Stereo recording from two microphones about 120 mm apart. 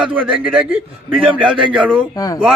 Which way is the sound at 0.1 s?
10° right (ahead or behind).